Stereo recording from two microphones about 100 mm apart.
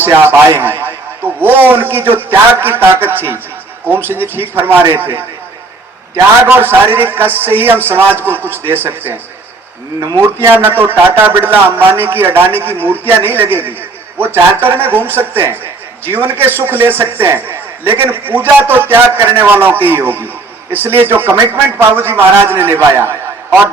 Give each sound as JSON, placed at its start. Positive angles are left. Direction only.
{"t": 0.0, "sound": "a man's voice", "side_deg": -20}
{"t": 10.2, "sound": "a man's voice", "side_deg": -25}